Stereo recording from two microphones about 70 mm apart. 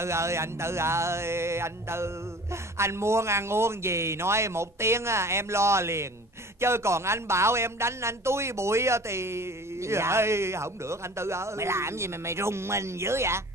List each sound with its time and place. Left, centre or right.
0.0 s speech: right